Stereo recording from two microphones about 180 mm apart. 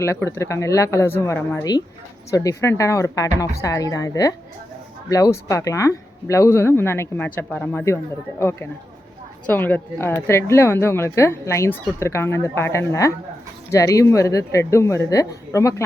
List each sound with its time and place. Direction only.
0.0 s a woman's voice: 15° left (ahead or behind)